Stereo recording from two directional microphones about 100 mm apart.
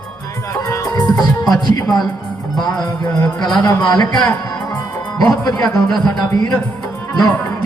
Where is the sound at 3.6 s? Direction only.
35° left (ahead or behind).